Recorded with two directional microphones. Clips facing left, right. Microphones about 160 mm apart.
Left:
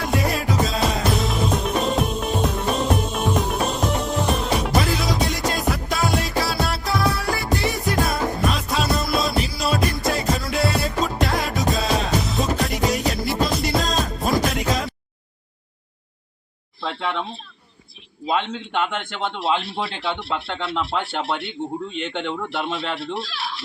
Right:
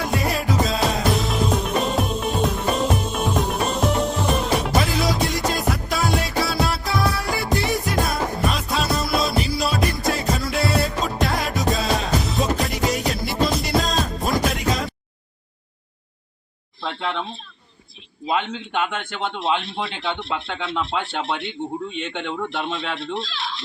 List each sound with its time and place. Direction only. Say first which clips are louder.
0.1 s music: left 2 dB; centre (ahead or behind)
16.8 s a man's voice: left 1 dB; 5° left (ahead or behind)
23.4 s a sound: even; 5° left (ahead or behind)